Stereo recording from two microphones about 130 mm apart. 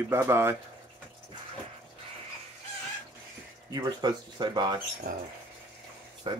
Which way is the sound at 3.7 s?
30° right (ahead or behind).